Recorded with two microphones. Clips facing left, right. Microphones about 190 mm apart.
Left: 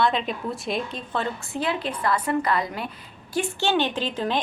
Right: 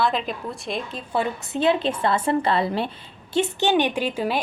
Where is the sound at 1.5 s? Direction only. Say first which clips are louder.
Right 7 dB; 25° right (ahead or behind).